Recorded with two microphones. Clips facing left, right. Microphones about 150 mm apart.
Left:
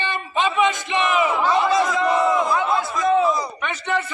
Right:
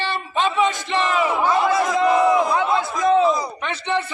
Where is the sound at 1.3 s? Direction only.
15° right (ahead or behind).